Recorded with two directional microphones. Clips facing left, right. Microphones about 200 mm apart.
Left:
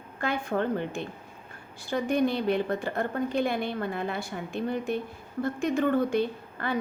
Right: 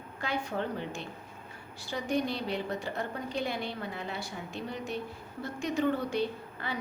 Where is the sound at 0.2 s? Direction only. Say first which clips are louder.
Left 5 dB; 55° left (ahead or behind).